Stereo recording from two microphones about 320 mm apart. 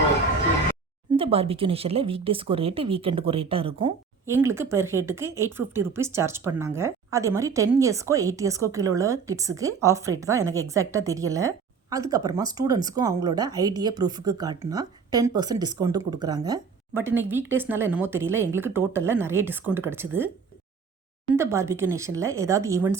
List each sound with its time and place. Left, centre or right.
1.1 s speech: centre
21.3 s speech: centre